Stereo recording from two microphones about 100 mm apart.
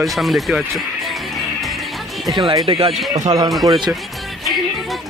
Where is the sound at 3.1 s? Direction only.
40° right (ahead or behind).